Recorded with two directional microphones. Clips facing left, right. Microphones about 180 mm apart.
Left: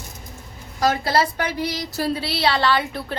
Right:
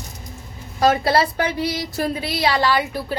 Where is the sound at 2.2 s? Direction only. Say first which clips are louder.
Right 2 dB; 15° right (ahead or behind).